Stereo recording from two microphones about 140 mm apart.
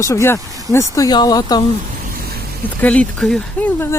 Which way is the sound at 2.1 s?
90° right.